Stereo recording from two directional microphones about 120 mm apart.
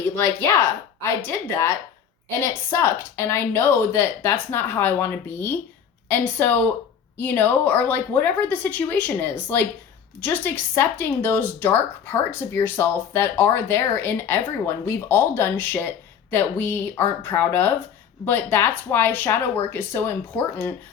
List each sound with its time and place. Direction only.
0.2 s a woman's voice: 20° left (ahead or behind)